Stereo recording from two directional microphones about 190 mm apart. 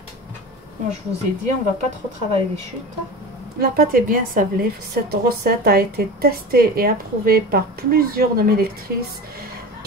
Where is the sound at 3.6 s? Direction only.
50° right (ahead or behind).